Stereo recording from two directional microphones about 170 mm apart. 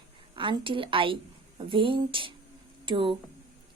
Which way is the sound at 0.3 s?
30° right (ahead or behind).